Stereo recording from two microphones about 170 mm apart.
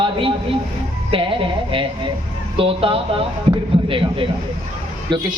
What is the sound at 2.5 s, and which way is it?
A man's voice, 35° right (ahead or behind).